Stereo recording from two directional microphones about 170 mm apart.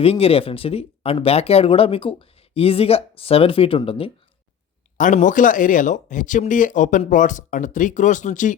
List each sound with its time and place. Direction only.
0.0 s speech: 35° left (ahead or behind)
4.9 s speech: 50° left (ahead or behind)